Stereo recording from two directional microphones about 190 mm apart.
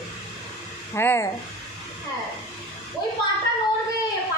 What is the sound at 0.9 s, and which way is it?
Speech, 10° left (ahead or behind).